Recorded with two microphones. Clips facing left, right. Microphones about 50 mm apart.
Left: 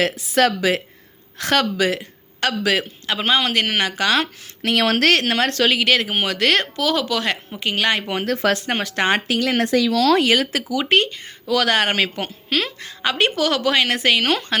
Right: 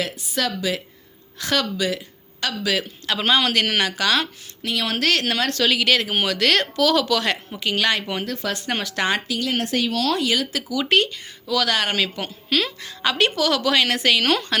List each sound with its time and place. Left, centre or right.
0.0 s speech: left
3.1 s speech: left
4.2 s speech: left
8.2 s speech: left
8.6 s speech: left
10.2 s speech: left
10.8 s speech: left